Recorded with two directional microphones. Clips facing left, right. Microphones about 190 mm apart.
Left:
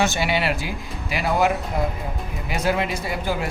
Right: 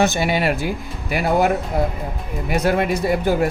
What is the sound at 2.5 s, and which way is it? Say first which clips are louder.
Speech: right 5 dB; 55° right (ahead or behind).